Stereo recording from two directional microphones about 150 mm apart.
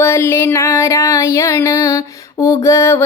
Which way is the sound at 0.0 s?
15° left (ahead or behind).